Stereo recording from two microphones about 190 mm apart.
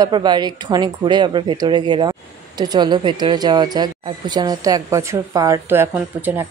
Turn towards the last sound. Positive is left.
turn(degrees=-10)  # may be behind; listen again after turning